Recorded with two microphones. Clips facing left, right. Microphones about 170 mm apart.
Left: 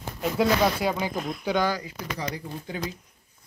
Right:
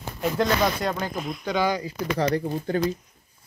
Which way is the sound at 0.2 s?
5° left (ahead or behind).